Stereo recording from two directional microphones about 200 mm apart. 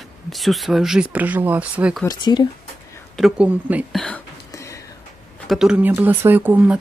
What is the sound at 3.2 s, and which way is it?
Speech, 5° right (ahead or behind).